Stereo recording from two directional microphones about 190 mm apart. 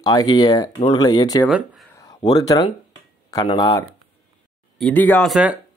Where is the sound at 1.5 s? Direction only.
Centre (ahead or behind).